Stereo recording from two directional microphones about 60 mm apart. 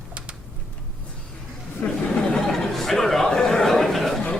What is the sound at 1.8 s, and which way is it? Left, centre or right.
Chatter, centre.